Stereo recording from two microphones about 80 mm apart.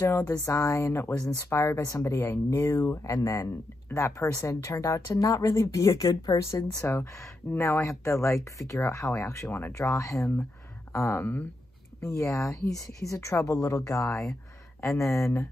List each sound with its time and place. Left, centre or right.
0.2 s speech: left